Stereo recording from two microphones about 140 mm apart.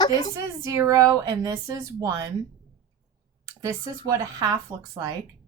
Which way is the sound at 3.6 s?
25° right (ahead or behind).